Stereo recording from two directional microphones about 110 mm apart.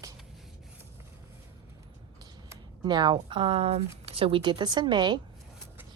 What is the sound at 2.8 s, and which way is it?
Speech, 40° right (ahead or behind).